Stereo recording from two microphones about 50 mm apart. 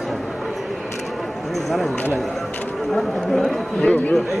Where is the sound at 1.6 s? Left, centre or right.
Centre.